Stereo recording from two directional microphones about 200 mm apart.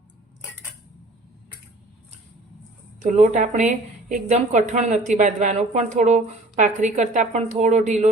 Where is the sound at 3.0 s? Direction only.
40° right (ahead or behind).